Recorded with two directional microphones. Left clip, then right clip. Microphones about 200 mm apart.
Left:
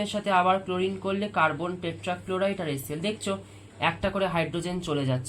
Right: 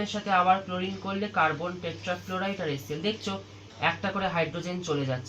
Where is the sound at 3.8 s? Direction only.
45° left (ahead or behind).